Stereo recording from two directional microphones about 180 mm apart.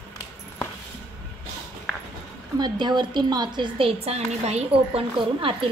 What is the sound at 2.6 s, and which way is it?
A woman's voice, 25° right (ahead or behind).